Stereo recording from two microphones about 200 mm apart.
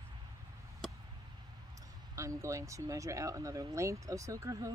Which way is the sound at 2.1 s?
15° right (ahead or behind).